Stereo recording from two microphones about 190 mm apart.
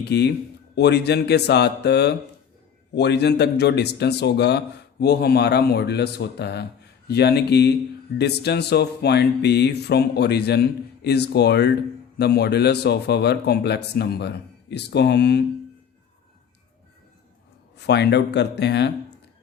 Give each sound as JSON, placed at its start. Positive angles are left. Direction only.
{"t": 0.0, "sound": "a man's voice", "side_deg": 60}
{"t": 17.7, "sound": "a man's voice", "side_deg": 60}